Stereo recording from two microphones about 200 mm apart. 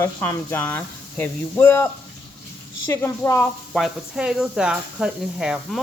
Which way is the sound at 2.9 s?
10° left (ahead or behind).